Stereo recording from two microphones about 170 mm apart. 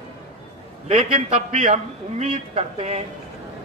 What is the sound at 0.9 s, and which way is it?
A man's voice, 40° right (ahead or behind).